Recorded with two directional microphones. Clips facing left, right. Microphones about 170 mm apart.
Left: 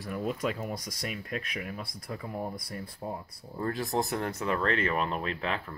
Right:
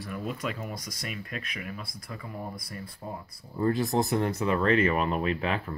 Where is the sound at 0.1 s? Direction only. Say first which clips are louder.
Left 3 dB; 35° left (ahead or behind).